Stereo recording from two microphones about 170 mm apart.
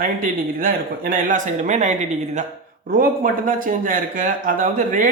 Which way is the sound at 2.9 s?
55° right (ahead or behind).